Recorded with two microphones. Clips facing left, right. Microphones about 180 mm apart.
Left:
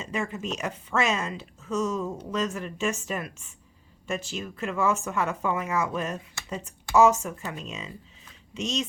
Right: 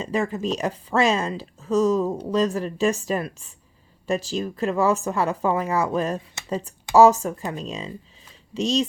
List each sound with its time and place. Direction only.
0.0 s speech: 35° right (ahead or behind)